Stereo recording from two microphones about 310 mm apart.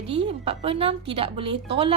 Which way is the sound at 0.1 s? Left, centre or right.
Centre.